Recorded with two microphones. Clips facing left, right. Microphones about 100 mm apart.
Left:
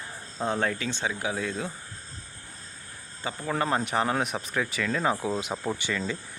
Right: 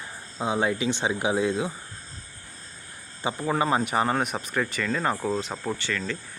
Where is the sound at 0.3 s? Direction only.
10° right (ahead or behind).